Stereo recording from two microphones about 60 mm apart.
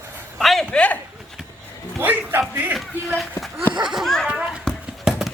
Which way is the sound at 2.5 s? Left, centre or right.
Right.